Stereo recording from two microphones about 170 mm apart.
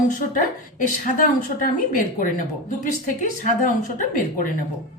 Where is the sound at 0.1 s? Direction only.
50° left (ahead or behind).